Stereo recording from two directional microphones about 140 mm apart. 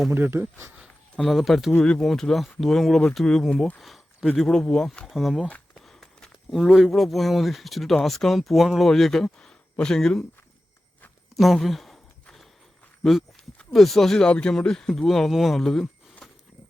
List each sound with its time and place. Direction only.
0.1 s speech: 15° right (ahead or behind)
1.1 s speech: centre (ahead or behind)
11.3 s a sound: centre (ahead or behind)
13.0 s walk: centre (ahead or behind)
13.7 s speech: centre (ahead or behind)